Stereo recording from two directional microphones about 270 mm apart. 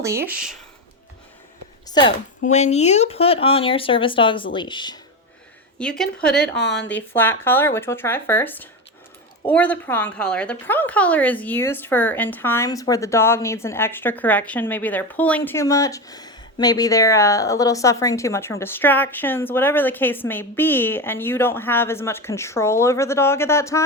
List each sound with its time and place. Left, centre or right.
0.0 s speech: centre
1.9 s a woman's voice: centre
5.8 s a woman's voice: centre
6.3 s a woman's voice: left
7.2 s a woman's voice: centre